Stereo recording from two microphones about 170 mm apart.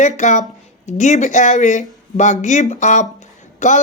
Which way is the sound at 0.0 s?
45° left (ahead or behind).